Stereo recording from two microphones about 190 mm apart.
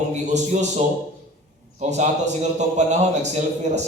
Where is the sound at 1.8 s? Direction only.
40° right (ahead or behind).